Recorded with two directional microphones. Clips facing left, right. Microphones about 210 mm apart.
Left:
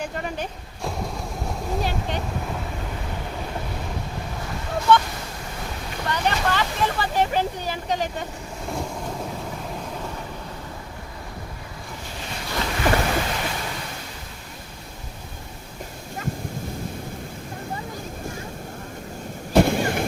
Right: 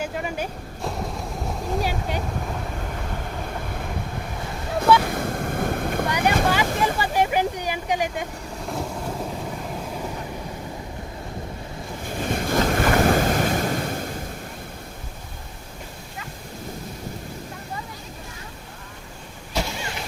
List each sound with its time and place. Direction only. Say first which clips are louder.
0.0 s a sound: right 1 dB; 5° right (ahead or behind)
5.0 s waves: right 8 dB; 55° right (ahead or behind)
6.1 s boat: even; 10° right (ahead or behind)
6.5 s a sound: right 2 dB; 10° right (ahead or behind)
12.0 s waves: right 10 dB; 50° right (ahead or behind)
19.5 s vehicle: left 10 dB; 55° left (ahead or behind)